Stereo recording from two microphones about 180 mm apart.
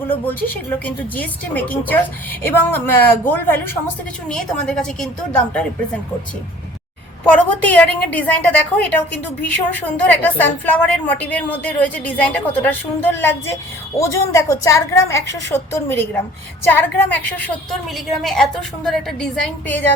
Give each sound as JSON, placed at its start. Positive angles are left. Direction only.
{"t": 0.1, "sound": "a woman's voice", "side_deg": 10}
{"t": 7.3, "sound": "a woman's voice", "side_deg": 10}